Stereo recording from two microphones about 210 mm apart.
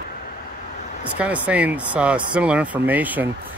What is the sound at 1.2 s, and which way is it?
Speech, 5° right (ahead or behind).